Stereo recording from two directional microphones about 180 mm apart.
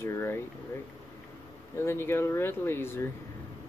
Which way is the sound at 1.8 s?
15° left (ahead or behind).